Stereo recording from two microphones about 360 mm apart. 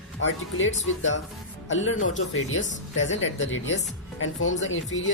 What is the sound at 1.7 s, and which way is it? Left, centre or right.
Speech, left.